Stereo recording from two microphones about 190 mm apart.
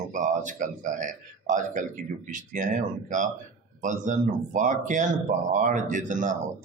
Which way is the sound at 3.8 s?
40° right (ahead or behind).